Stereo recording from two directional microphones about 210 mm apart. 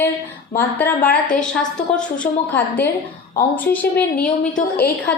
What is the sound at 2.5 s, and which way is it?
Speech, 10° left (ahead or behind).